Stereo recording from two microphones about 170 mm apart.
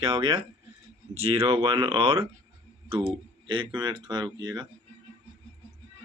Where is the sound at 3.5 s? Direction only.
25° right (ahead or behind).